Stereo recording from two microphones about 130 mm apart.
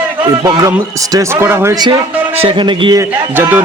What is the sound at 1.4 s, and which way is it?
Speech, 20° right (ahead or behind).